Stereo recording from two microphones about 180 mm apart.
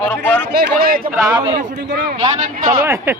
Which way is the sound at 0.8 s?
55° right (ahead or behind).